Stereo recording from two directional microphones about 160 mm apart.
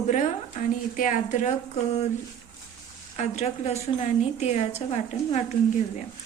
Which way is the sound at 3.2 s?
45° left (ahead or behind).